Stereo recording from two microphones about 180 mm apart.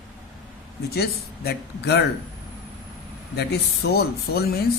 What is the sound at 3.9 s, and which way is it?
Speech, 60° left (ahead or behind).